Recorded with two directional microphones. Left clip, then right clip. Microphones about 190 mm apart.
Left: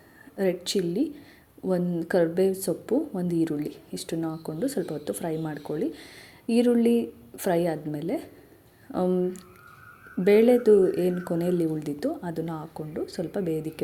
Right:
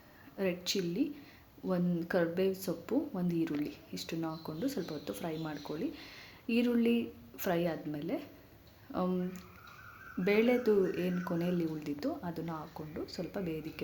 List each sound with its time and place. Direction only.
0.3 s speech: 25° left (ahead or behind)